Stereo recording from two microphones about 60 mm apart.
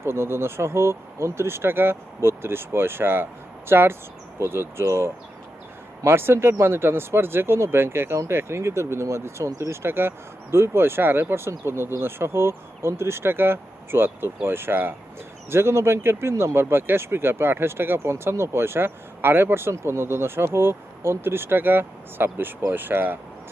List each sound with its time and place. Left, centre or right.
0.0 s speech: right